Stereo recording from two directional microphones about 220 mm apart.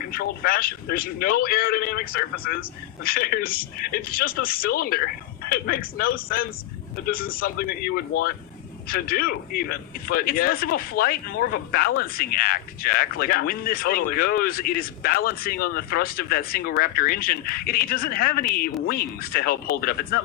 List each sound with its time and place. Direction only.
0.1 s a man's voice: 40° left (ahead or behind)